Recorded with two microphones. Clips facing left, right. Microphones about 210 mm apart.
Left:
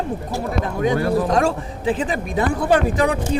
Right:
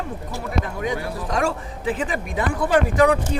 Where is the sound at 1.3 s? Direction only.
35° left (ahead or behind).